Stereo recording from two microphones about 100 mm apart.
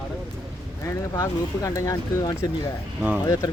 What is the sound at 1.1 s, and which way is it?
Speech, 35° left (ahead or behind).